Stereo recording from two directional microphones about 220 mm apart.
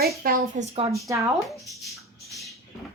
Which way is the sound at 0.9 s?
15° right (ahead or behind).